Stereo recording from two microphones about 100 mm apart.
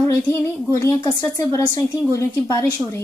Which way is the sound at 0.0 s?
30° left (ahead or behind).